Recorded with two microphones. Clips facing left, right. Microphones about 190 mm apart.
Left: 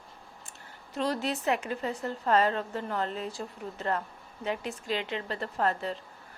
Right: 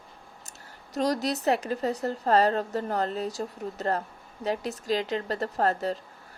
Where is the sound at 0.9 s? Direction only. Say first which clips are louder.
Right 4 dB; 40° right (ahead or behind).